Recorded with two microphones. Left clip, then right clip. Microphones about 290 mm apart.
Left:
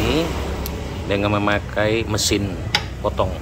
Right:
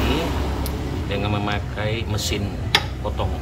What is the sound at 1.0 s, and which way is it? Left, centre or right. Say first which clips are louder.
Speech: left 7 dB; centre.